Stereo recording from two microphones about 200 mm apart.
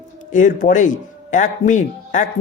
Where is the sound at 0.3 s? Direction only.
40° left (ahead or behind).